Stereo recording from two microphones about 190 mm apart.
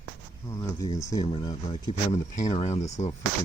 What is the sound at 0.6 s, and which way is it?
Speech, 15° left (ahead or behind).